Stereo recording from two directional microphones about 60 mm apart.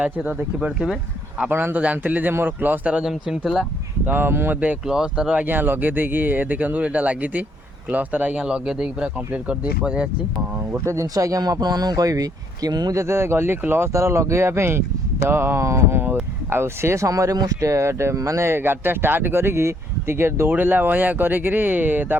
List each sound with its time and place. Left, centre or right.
0.0 s speech: right
1.5 s speech: right
2.9 s speech: centre
4.0 s speech: right
4.9 s speech: centre
5.4 s speech: right
8.4 s speech: centre
10.8 s speech: right
13.9 s speech: right
18.4 s speech: right
20.5 s speech: right